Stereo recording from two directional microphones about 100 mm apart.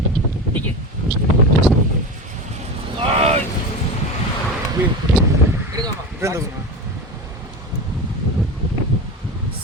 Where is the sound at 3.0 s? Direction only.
75° right (ahead or behind).